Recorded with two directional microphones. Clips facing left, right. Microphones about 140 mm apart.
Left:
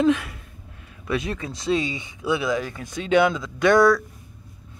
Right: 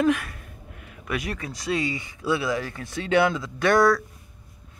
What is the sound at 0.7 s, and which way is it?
Speech, 25° left (ahead or behind).